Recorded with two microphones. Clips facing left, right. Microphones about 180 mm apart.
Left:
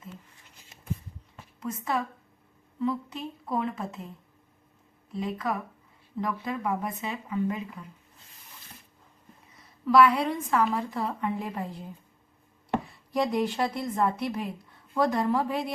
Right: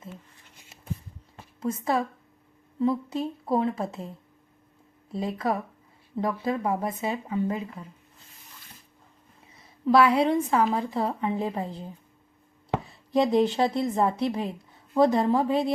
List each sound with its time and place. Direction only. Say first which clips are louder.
1.6 s a woman's voice: right 4 dB; 30° right (ahead or behind)
5.1 s a woman's voice: right 3 dB; 35° right (ahead or behind)
9.8 s a woman's voice: right 1 dB; 30° right (ahead or behind)
13.3 s a woman's voice: right 5 dB; 25° right (ahead or behind)